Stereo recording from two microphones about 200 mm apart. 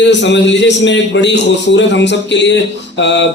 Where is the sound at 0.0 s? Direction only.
60° left (ahead or behind).